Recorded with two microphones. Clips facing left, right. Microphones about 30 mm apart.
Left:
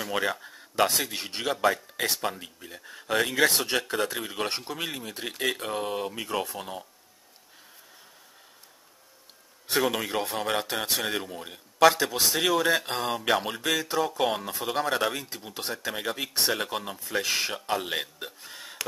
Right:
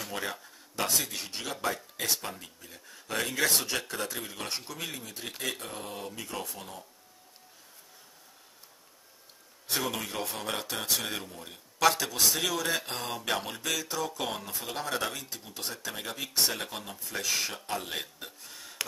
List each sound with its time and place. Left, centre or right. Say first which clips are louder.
0.4 s speech: left 9 dB; left
9.8 s speech: left 7 dB; left
11.2 s speech: left 6 dB; left
12.6 s speech: left 6 dB; centre
13.6 s speech: left 6 dB; left
14.8 s speech: left 6 dB; left
18.5 s a sound: left 4 dB; left